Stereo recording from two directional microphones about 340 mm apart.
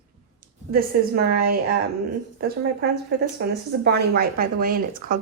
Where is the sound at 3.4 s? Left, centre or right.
Right.